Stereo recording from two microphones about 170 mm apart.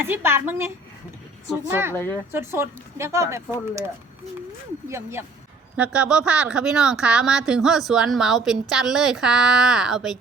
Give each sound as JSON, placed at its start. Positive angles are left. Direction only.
{"t": 0.1, "sound": "speech", "side_deg": -15}
{"t": 1.7, "sound": "speech", "side_deg": -15}